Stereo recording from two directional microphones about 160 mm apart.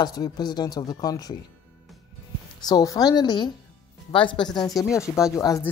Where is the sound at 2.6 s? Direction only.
25° left (ahead or behind).